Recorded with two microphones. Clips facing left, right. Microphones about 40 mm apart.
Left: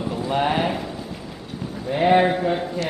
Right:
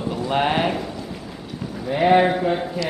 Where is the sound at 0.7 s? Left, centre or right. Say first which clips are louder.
Right 1 dB; centre.